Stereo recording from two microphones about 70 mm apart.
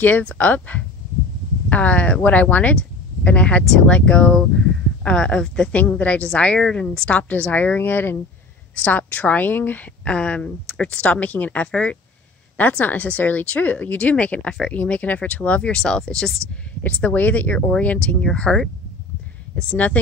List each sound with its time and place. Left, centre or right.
0.0 s a woman's voice: left
10.0 s a woman's voice: centre
16.8 s a woman's voice: left
19.8 s speech: left